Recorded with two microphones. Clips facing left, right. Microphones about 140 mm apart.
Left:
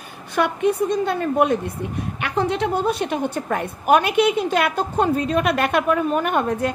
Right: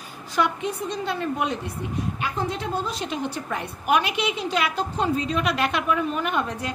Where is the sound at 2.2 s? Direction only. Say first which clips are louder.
Left 10 dB; 70° left (ahead or behind).